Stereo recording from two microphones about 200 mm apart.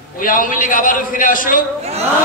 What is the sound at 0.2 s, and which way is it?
A man's voice, 45° left (ahead or behind).